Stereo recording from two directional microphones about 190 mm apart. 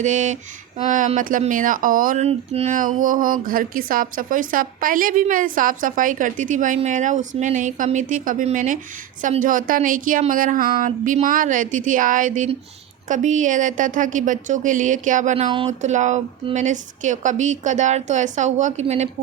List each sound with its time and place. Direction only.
0.0 s a woman's voice: 40° right (ahead or behind)
15.4 s speech: 25° right (ahead or behind)
15.8 s a woman's voice: 40° right (ahead or behind)